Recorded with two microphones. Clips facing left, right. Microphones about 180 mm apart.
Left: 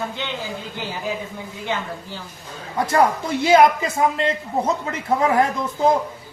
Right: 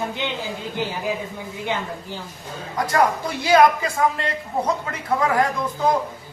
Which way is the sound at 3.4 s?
20° left (ahead or behind).